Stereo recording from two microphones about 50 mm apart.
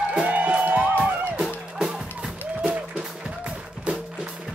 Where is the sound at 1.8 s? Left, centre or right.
Centre.